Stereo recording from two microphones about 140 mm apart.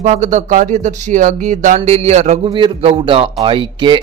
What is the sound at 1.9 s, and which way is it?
Speech, 55° right (ahead or behind).